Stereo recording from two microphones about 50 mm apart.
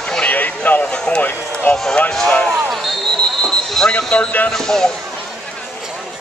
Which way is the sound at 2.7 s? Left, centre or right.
Centre.